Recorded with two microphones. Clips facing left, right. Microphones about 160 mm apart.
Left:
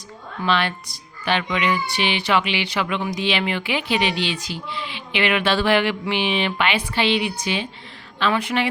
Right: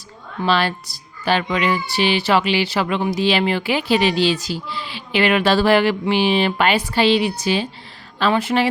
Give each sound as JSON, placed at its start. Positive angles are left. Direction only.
{"t": 0.4, "sound": "speech", "side_deg": -35}